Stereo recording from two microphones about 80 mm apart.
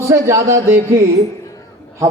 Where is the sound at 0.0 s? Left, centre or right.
Right.